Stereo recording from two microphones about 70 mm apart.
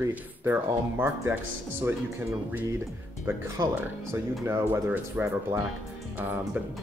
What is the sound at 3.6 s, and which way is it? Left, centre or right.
Speech, right.